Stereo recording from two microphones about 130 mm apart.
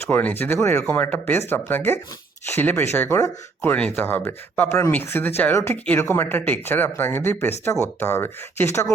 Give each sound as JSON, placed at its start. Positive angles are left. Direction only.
{"t": 0.1, "sound": "speech", "side_deg": 15}